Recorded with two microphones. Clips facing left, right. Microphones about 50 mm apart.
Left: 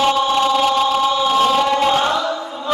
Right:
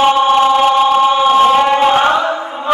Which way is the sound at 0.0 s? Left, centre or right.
Right.